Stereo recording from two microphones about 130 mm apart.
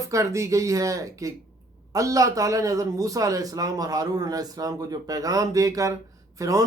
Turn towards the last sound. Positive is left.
turn(degrees=-25)  # may be behind; listen again after turning